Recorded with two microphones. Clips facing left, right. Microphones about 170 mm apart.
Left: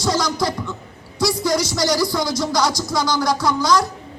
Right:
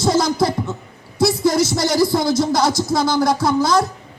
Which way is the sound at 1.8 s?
25° right (ahead or behind).